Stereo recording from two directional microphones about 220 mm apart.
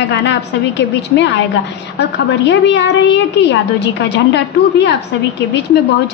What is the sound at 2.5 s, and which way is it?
A woman's voice, 55° left (ahead or behind).